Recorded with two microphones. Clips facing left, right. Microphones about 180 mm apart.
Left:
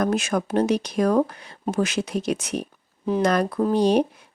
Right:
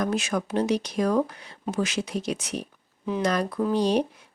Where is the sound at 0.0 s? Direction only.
50° left (ahead or behind).